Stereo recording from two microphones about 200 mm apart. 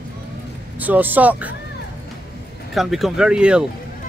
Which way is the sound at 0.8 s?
10° right (ahead or behind).